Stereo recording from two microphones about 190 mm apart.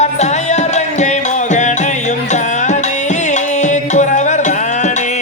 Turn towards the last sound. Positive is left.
turn(degrees=40)  # may be behind; listen again after turning